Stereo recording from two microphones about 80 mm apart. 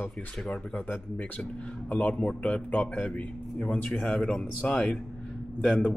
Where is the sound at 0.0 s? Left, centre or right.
Left.